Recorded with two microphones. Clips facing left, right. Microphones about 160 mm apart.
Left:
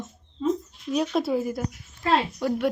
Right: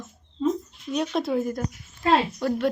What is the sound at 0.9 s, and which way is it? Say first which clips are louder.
Speech: left 1 dB; centre (ahead or behind).